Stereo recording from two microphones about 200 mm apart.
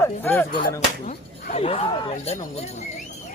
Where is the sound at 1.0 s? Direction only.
40° left (ahead or behind).